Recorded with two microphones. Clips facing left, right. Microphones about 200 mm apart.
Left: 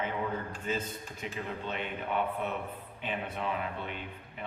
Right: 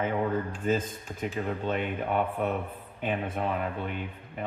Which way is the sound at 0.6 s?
50° right (ahead or behind).